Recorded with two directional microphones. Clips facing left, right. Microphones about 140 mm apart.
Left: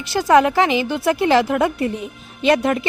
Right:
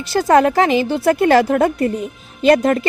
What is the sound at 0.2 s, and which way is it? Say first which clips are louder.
A woman's voice: right 1 dB; 45° right (ahead or behind).